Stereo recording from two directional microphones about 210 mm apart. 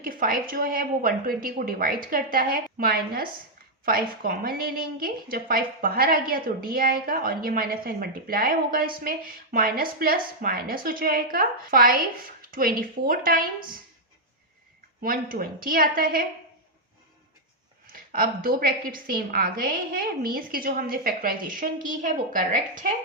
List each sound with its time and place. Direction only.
0.0 s a woman's voice: 45° right (ahead or behind)
15.0 s a woman's voice: 45° right (ahead or behind)
17.9 s a woman's voice: 45° right (ahead or behind)